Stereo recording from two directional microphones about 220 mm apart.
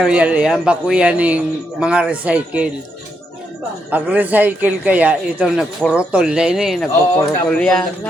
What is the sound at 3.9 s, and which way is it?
A man's voice, 5° right (ahead or behind).